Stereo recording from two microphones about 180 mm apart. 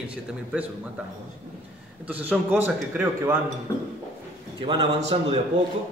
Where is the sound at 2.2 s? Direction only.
10° right (ahead or behind).